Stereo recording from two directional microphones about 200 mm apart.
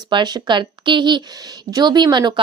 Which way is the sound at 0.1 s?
20° right (ahead or behind).